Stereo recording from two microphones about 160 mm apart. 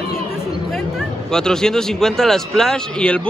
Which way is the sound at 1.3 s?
5° left (ahead or behind).